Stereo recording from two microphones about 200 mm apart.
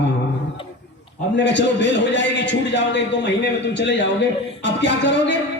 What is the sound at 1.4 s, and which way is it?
A man's voice, 65° left (ahead or behind).